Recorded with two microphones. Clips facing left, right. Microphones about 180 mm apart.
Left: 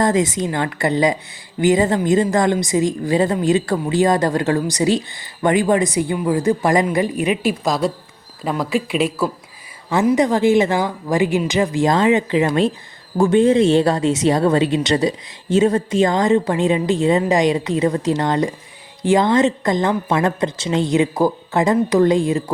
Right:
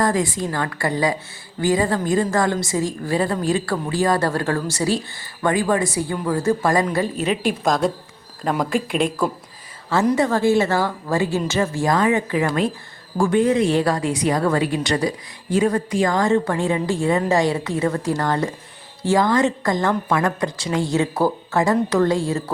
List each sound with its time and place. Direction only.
0.0 s a woman's voice: 20° left (ahead or behind)
7.6 s speech: centre (ahead or behind)
10.2 s a woman's voice: 15° left (ahead or behind)